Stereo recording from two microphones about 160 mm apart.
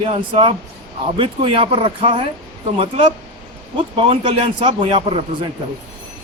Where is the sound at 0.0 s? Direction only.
35° right (ahead or behind).